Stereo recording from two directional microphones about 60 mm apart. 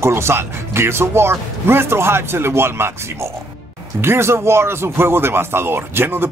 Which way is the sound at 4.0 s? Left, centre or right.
Right.